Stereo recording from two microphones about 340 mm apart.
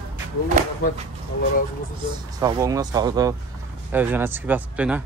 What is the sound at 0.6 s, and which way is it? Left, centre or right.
Speech, right.